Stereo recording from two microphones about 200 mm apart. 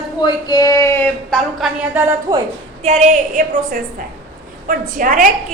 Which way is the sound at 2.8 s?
35° right (ahead or behind).